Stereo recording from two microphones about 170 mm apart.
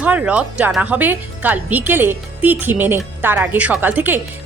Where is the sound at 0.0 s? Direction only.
10° right (ahead or behind).